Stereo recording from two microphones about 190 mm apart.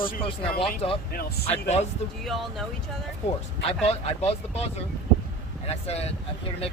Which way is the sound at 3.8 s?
30° left (ahead or behind).